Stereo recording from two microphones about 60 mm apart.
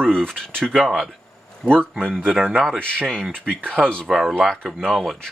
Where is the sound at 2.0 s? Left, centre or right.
Right.